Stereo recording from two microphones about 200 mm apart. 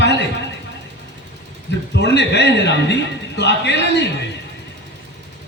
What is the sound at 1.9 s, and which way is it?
A man's voice, 60° left (ahead or behind).